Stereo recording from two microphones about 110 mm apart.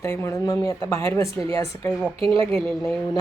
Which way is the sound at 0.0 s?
25° left (ahead or behind).